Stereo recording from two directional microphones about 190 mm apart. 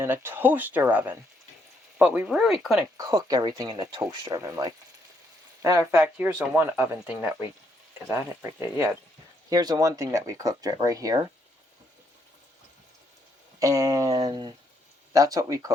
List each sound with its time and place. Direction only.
0.0 s speech: 10° right (ahead or behind)
3.0 s speech: 20° right (ahead or behind)
5.8 s speech: 5° right (ahead or behind)
9.5 s speech: 20° right (ahead or behind)
13.6 s a sound: 15° right (ahead or behind)
14.3 s speech: 25° right (ahead or behind)